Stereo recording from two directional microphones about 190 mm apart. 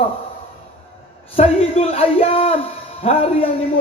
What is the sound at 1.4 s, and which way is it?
A man's voice, 30° left (ahead or behind).